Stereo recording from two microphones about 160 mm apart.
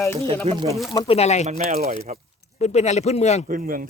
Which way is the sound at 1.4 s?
45° right (ahead or behind).